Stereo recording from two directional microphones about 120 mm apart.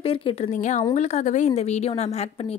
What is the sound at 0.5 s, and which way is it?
Speech, 90° left.